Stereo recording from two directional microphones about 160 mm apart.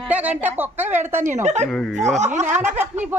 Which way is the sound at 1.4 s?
45° right (ahead or behind).